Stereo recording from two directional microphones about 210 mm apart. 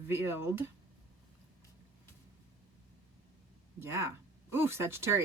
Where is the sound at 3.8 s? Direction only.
10° right (ahead or behind).